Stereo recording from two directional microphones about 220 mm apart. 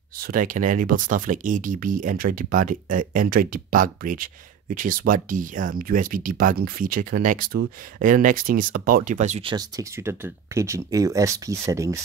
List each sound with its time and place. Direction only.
0.2 s speech: 40° right (ahead or behind); by 12.0 s 15° right (ahead or behind)